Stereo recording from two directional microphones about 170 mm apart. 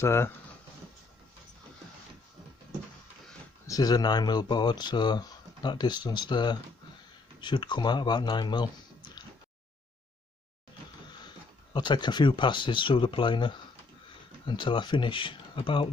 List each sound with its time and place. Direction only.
0.0 s speech: 15° left (ahead or behind)
3.6 s speech: 20° left (ahead or behind)
11.2 s speech: 25° left (ahead or behind)